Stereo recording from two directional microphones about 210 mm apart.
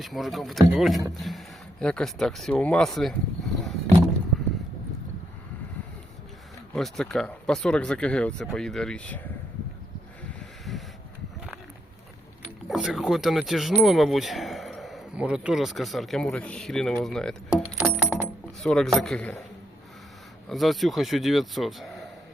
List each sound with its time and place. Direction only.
0.0 s speech: centre (ahead or behind)
6.7 s speech: centre (ahead or behind)
10.2 s a sound: centre (ahead or behind)
12.6 s speech: centre (ahead or behind)
17.7 s a sound: 5° right (ahead or behind)
18.6 s speech: 5° left (ahead or behind)
20.5 s speech: centre (ahead or behind)